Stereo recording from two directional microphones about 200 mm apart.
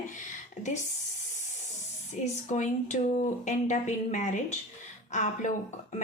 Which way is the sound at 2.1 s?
35° left (ahead or behind).